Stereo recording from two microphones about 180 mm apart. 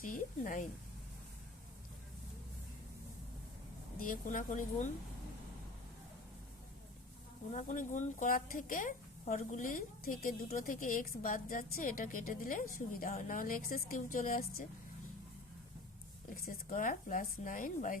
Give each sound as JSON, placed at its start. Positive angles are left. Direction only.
{"t": 0.0, "sound": "speech", "side_deg": 50}
{"t": 4.0, "sound": "speech", "side_deg": 50}
{"t": 7.5, "sound": "speech", "side_deg": 45}
{"t": 16.3, "sound": "speech", "side_deg": 50}